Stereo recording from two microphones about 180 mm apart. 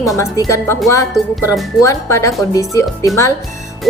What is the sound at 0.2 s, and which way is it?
Speech, 20° left (ahead or behind).